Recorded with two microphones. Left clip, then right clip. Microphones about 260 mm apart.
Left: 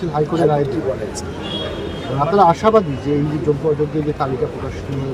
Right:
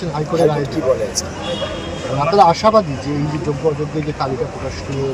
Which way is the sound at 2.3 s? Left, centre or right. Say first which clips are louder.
Right 1 dB; centre.